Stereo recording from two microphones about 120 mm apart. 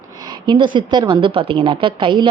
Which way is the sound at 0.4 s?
40° right (ahead or behind).